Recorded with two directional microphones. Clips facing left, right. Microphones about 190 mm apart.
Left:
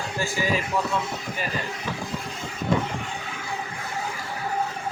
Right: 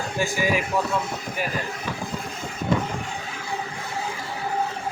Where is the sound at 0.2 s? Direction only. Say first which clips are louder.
Right 2 dB; 15° right (ahead or behind).